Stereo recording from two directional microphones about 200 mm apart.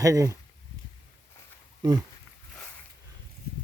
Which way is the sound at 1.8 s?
20° right (ahead or behind).